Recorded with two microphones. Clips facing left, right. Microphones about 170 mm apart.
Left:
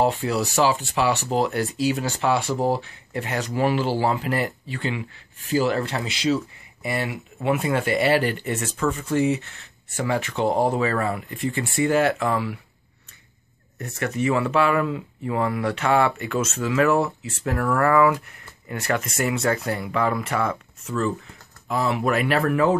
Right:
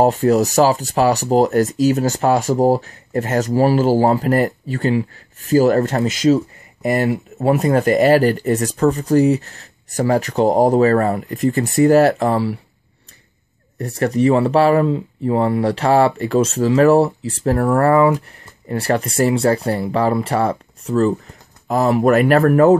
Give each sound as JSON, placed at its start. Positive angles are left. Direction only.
{"t": 0.0, "sound": "speech", "side_deg": -45}
{"t": 13.7, "sound": "speech", "side_deg": -35}